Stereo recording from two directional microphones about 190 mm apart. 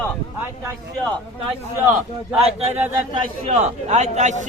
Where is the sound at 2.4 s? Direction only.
35° right (ahead or behind).